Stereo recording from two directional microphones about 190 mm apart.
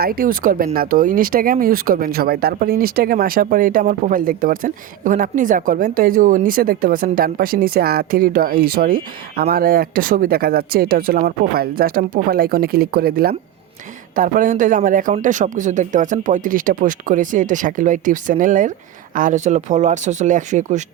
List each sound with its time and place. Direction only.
0.0 s speech: 50° right (ahead or behind)